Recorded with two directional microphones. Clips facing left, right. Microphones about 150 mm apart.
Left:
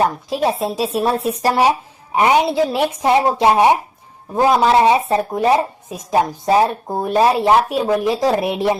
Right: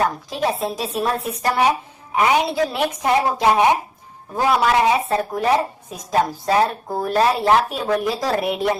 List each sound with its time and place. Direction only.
0.0 s speech: 25° left (ahead or behind)